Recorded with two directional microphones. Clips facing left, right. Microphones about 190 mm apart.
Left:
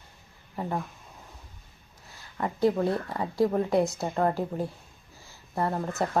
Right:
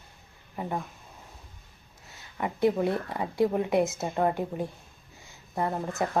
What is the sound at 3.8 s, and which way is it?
Speech, centre (ahead or behind).